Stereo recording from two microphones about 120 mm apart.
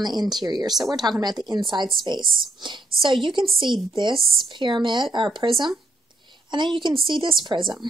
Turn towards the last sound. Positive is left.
turn(degrees=-40)  # may be behind; listen again after turning